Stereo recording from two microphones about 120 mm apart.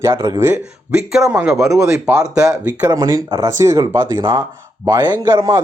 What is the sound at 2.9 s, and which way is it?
Speech, 30° right (ahead or behind).